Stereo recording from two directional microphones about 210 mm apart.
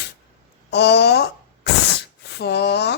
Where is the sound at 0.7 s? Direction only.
55° left (ahead or behind).